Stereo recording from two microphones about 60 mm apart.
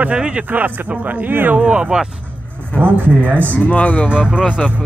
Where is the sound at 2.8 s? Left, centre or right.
Right.